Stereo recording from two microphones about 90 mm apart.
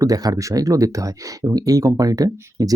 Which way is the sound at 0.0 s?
45° right (ahead or behind).